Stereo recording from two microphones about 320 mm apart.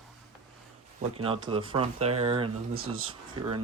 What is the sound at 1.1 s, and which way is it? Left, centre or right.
Speech, centre.